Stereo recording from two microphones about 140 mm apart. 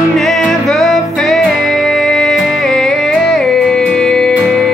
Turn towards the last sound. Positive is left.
turn(degrees=5)  # may be behind; listen again after turning